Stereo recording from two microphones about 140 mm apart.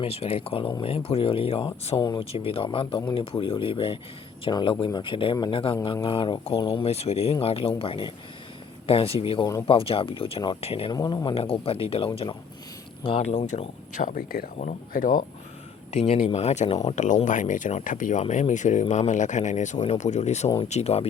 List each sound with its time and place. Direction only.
0.0 s speech: 45° left (ahead or behind)
10.9 s speech: 25° left (ahead or behind); by 15.2 s 70° left (ahead or behind)
15.9 s speech: 50° left (ahead or behind)